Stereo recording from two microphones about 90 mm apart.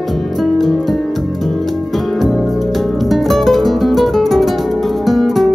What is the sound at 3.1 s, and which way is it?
Music, centre (ahead or behind).